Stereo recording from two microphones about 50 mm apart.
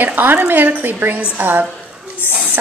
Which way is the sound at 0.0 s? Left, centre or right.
Right.